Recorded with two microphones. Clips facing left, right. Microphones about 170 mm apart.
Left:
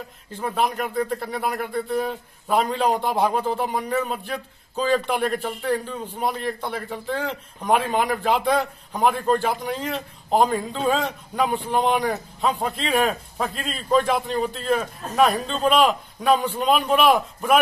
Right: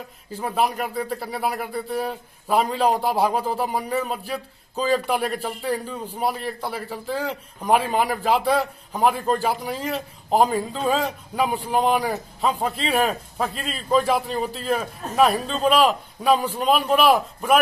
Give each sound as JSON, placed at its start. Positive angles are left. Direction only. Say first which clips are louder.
{"t": 0.3, "sound": "a man's voice", "louder": "right 1 dB", "side_deg": -5}